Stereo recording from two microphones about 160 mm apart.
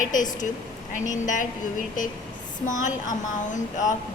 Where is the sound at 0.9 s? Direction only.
50° left (ahead or behind).